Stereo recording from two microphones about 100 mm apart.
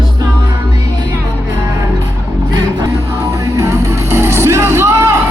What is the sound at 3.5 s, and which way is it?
Music, 30° right (ahead or behind).